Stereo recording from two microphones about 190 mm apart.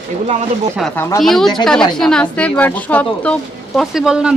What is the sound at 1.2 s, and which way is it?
A woman's voice, centre (ahead or behind).